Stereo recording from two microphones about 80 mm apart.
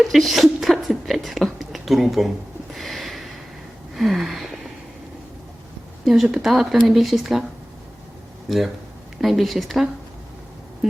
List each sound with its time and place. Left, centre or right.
0.0 s speech: centre
2.7 s a sound: centre
6.3 s a woman's voice: centre
8.4 s a woman's voice: centre